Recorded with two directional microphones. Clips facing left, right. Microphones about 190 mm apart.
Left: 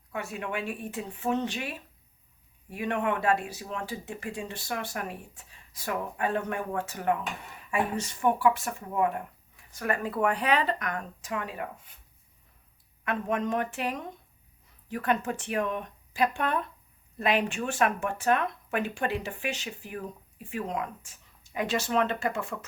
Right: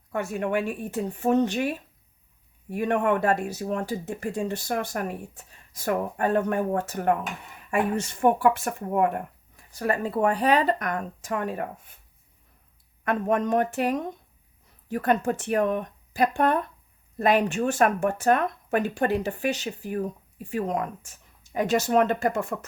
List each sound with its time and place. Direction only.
0.1 s speech: 45° right (ahead or behind)
9.7 s speech: 30° right (ahead or behind); by 11.9 s 50° right (ahead or behind)
13.1 s speech: 45° right (ahead or behind)